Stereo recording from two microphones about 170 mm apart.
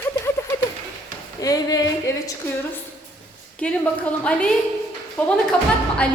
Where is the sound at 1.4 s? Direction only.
20° left (ahead or behind).